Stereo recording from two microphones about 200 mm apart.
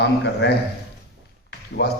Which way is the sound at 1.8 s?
55° left (ahead or behind).